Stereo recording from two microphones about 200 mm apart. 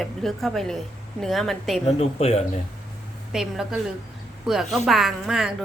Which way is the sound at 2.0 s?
30° left (ahead or behind).